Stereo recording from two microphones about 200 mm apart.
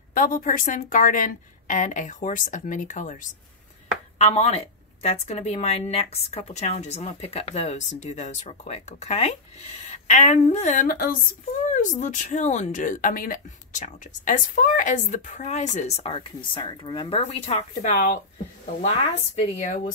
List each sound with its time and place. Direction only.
0.1 s speech: 40° left (ahead or behind)